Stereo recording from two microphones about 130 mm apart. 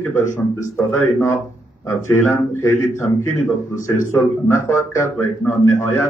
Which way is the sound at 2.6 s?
20° left (ahead or behind).